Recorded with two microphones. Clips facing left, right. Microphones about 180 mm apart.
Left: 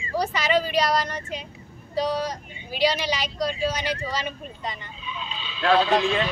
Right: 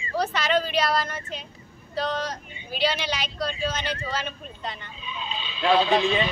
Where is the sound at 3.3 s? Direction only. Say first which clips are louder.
Left 3 dB; 10° left (ahead or behind).